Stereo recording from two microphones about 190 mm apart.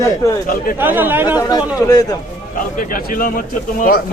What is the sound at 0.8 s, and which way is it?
Speech, 10° right (ahead or behind).